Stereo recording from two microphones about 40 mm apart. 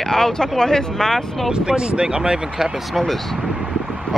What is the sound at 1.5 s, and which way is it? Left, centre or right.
Speech, right.